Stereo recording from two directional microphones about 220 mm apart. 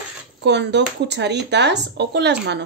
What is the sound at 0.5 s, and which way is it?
Speech, 50° right (ahead or behind).